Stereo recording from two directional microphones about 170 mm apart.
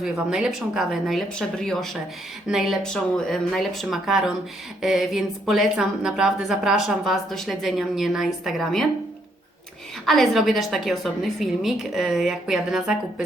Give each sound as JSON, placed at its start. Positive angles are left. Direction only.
{"t": 0.0, "sound": "a woman's voice", "side_deg": -5}
{"t": 10.1, "sound": "a woman's voice", "side_deg": 0}